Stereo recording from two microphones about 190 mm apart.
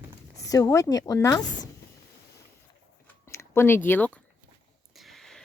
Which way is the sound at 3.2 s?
15° left (ahead or behind).